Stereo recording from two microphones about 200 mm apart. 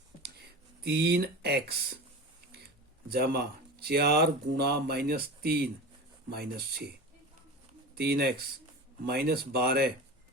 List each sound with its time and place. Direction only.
0.9 s speech: 55° right (ahead or behind)
3.1 s speech: 55° right (ahead or behind)
7.9 s speech: 55° right (ahead or behind)